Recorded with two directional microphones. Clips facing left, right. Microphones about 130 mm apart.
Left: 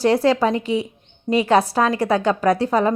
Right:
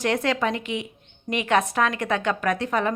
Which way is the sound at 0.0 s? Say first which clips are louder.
Left 7 dB; 35° left (ahead or behind).